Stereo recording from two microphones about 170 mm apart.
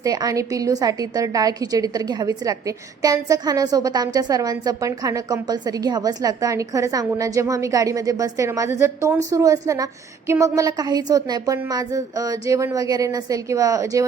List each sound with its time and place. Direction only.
0.0 s a woman's voice: 20° right (ahead or behind)